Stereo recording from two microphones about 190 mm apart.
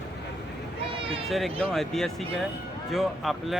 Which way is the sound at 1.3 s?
Centre (ahead or behind).